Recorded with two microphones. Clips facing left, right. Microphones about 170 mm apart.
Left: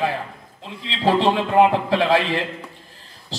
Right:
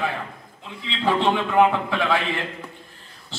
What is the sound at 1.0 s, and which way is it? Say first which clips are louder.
A man's voice: left 3 dB; 35° left (ahead or behind).